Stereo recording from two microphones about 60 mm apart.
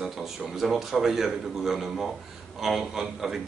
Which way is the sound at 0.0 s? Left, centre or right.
Centre.